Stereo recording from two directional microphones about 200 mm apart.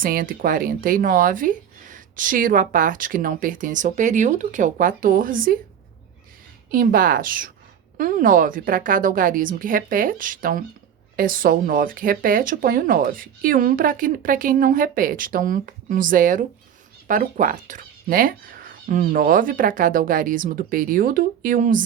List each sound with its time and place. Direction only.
0.0 s speech: 45° right (ahead or behind)
6.7 s speech: 45° right (ahead or behind)